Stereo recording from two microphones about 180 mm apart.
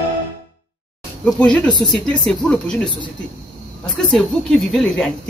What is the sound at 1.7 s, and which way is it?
Speech, 25° left (ahead or behind).